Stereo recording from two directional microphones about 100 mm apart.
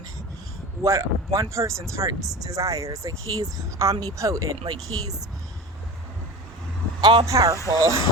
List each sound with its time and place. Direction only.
0.8 s speech: 25° right (ahead or behind)
4.6 s speech: 45° right (ahead or behind)
7.0 s speech: 50° right (ahead or behind)
7.3 s speech: 30° right (ahead or behind)